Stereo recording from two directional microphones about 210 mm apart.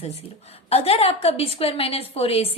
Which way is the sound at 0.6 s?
30° left (ahead or behind).